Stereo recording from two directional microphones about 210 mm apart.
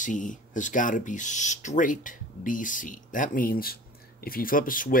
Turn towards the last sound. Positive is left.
turn(degrees=40)  # may be behind; listen again after turning